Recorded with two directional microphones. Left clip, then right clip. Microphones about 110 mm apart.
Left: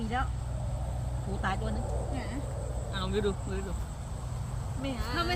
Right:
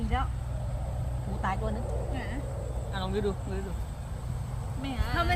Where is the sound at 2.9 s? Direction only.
5° right (ahead or behind).